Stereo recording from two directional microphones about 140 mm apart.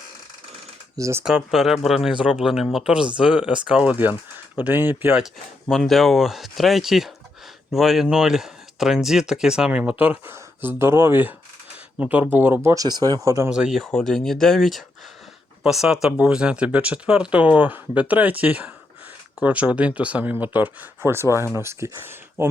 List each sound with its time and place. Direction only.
0.9 s speech: 20° right (ahead or behind)
1.2 s speech: 5° right (ahead or behind)
5.2 s speech: centre (ahead or behind)
12.6 s speech: 25° right (ahead or behind)
13.5 s speech: 5° right (ahead or behind)